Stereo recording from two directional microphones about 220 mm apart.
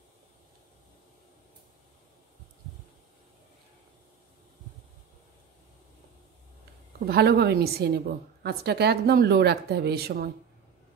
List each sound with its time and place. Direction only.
7.1 s a woman's voice: 45° right (ahead or behind)